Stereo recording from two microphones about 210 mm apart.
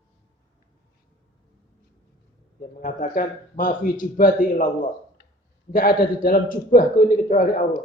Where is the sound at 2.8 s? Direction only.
40° left (ahead or behind).